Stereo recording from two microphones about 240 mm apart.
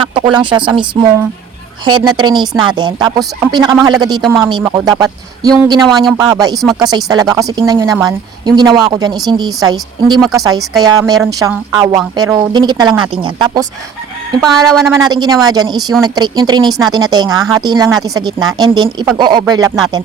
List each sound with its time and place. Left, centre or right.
0.0 s a woman's voice: centre
10.2 s speech: centre
10.8 s a woman's voice: centre
14.4 s speech: centre
15.1 s a woman's voice: centre